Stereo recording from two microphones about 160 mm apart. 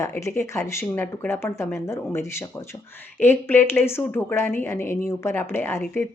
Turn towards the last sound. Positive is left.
turn(degrees=15)  # may be behind; listen again after turning